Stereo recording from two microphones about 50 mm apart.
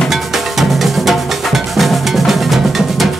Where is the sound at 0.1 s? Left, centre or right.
Centre.